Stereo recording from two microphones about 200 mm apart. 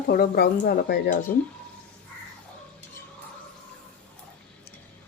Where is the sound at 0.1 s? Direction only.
50° left (ahead or behind).